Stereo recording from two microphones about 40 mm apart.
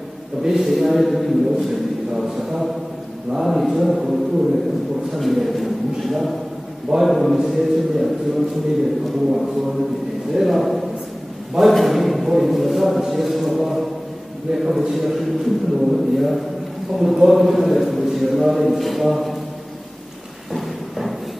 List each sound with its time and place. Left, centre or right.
0.4 s a man's voice: centre
10.3 s a man's voice: centre
20.5 s a sound: centre